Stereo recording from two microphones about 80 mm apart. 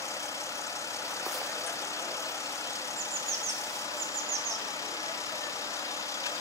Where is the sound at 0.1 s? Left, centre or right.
Left.